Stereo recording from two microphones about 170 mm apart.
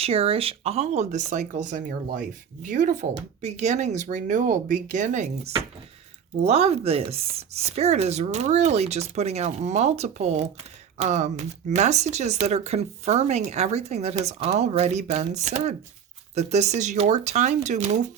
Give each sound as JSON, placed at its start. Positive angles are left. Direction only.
{"t": 0.0, "sound": "speech", "side_deg": -35}